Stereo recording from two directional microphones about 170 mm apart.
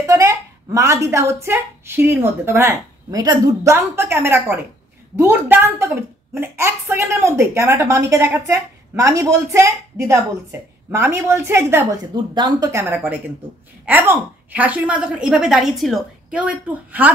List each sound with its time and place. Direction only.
0.0 s a woman's voice: 20° right (ahead or behind)